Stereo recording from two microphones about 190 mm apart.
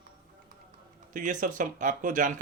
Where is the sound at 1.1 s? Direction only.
45° right (ahead or behind).